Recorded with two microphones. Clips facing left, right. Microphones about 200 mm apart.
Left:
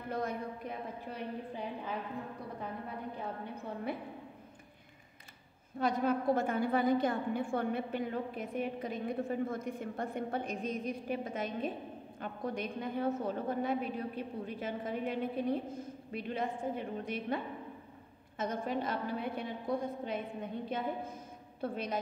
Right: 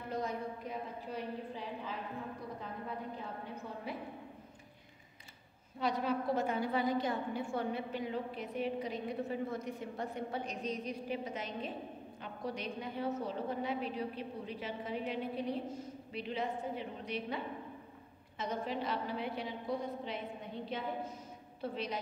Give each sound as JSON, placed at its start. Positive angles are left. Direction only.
{"t": 0.1, "sound": "a woman's voice", "side_deg": 55}
{"t": 5.8, "sound": "a woman's voice", "side_deg": 50}
{"t": 18.4, "sound": "a woman's voice", "side_deg": 50}